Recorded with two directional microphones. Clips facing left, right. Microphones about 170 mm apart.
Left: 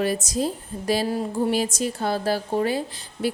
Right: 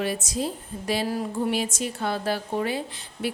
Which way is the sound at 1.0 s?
25° left (ahead or behind).